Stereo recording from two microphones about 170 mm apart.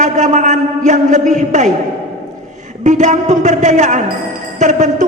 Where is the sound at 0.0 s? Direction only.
45° right (ahead or behind).